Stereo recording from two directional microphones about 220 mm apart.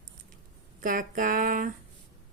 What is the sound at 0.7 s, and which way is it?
Speech, 40° right (ahead or behind).